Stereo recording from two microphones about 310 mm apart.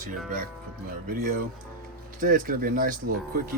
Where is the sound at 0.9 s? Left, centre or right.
Right.